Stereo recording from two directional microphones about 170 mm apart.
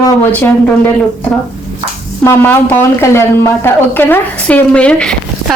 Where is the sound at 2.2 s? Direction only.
15° left (ahead or behind).